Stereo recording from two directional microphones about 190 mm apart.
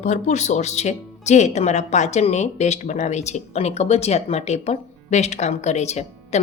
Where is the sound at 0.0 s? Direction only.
40° left (ahead or behind).